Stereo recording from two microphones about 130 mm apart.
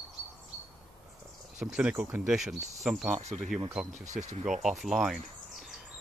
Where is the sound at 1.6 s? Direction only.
5° right (ahead or behind).